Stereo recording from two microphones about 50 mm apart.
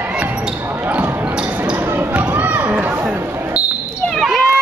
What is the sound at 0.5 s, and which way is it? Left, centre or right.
Basketball bounce, right.